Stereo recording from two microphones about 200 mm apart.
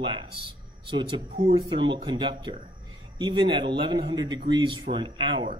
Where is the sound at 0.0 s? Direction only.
25° right (ahead or behind).